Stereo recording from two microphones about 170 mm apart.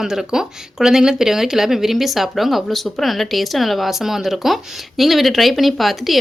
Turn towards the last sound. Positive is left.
turn(degrees=0)  # may be behind; listen again after turning